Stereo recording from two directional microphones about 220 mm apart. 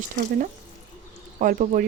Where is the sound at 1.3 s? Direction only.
35° right (ahead or behind).